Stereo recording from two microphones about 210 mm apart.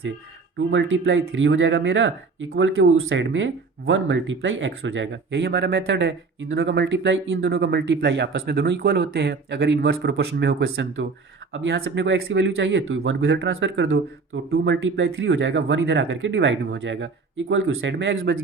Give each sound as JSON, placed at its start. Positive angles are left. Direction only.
{"t": 0.7, "sound": "speech", "side_deg": -65}